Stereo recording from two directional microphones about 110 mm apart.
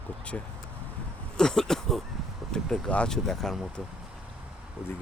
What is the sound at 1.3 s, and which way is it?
Speech, 5° left (ahead or behind).